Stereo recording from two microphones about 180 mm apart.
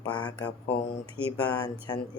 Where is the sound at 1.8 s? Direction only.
25° left (ahead or behind).